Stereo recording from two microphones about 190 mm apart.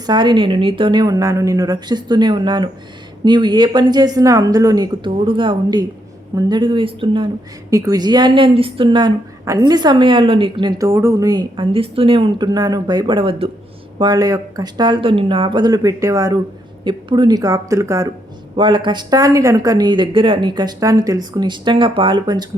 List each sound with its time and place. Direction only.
0.0 s a woman's voice: 25° right (ahead or behind)